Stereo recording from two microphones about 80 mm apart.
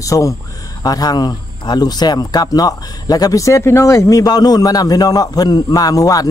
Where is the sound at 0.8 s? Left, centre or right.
Left.